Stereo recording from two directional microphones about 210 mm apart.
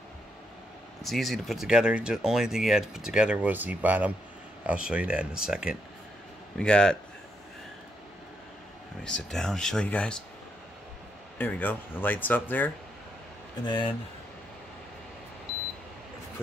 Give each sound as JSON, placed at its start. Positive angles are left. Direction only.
{"t": 1.0, "sound": "speech", "side_deg": 0}
{"t": 9.0, "sound": "speech", "side_deg": 5}
{"t": 11.3, "sound": "speech", "side_deg": 10}
{"t": 13.7, "sound": "speech", "side_deg": 25}